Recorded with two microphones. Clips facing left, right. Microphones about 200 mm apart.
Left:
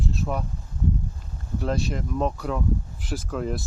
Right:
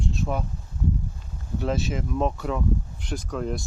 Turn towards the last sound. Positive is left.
turn(degrees=0)  # may be behind; listen again after turning